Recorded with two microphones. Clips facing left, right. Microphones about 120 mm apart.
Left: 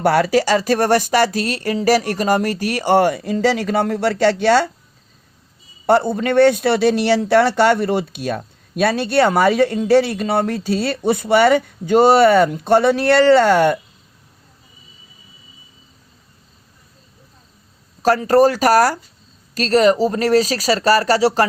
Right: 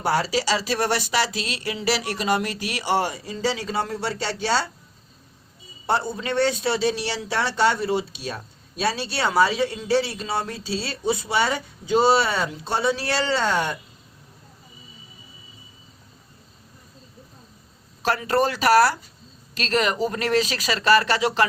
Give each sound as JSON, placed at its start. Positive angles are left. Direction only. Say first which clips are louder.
{"t": 0.0, "sound": "speech", "louder": "left 8 dB", "side_deg": 60}
{"t": 5.8, "sound": "a man's voice", "louder": "left 9 dB", "side_deg": 60}
{"t": 18.0, "sound": "speech", "louder": "left 9 dB", "side_deg": 40}